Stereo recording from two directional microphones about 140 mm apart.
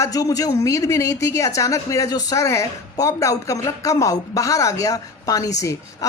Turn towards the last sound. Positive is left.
turn(degrees=25)  # may be behind; listen again after turning